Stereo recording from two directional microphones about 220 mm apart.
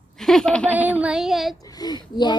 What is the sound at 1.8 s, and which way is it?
Speech, 20° left (ahead or behind).